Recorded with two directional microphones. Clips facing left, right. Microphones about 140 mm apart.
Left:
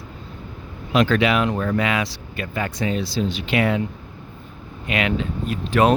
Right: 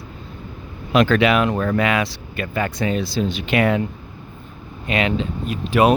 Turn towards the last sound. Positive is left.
turn(degrees=-10)  # may be behind; listen again after turning